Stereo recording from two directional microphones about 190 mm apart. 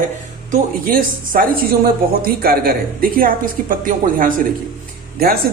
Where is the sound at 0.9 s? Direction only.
50° right (ahead or behind).